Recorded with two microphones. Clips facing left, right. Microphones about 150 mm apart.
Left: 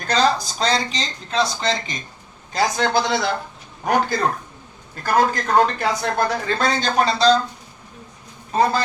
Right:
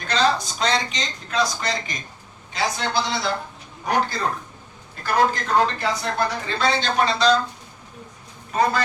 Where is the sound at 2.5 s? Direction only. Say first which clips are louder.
Left 5 dB; 50° left (ahead or behind).